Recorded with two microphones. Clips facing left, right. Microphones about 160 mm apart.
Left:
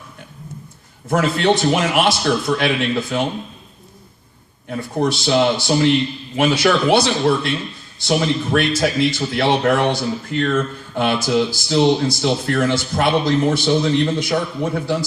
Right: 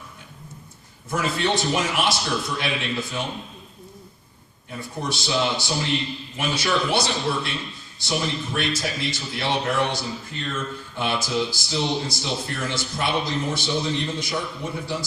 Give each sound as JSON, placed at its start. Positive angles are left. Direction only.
{"t": 1.1, "sound": "a man's voice", "side_deg": 65}
{"t": 4.7, "sound": "a man's voice", "side_deg": 60}
{"t": 12.2, "sound": "speech", "side_deg": 70}